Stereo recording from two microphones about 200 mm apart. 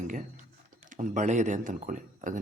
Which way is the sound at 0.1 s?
40° right (ahead or behind).